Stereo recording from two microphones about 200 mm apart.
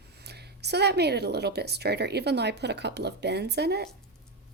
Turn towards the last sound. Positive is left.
turn(degrees=-55)  # may be behind; listen again after turning